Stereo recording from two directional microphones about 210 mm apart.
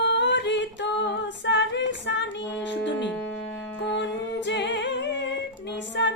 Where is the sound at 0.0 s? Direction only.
55° left (ahead or behind).